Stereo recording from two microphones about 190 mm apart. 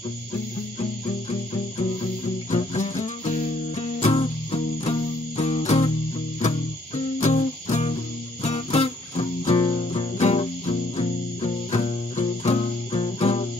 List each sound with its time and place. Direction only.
2.5 s music: 35° left (ahead or behind)
7.2 s music: 35° left (ahead or behind)